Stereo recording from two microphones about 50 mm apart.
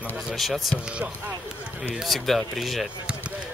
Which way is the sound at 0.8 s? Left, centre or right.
Right.